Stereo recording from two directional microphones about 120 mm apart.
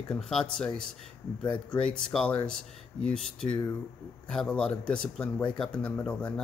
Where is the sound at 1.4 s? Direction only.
40° left (ahead or behind).